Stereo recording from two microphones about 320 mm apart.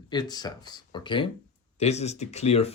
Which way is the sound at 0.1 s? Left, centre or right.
Centre.